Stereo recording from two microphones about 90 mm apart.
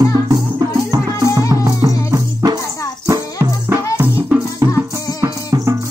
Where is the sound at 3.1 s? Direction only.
30° right (ahead or behind).